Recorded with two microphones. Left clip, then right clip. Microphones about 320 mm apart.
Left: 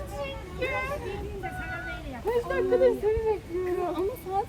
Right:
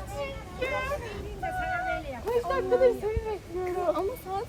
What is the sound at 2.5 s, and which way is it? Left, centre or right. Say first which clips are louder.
Speech: even; centre.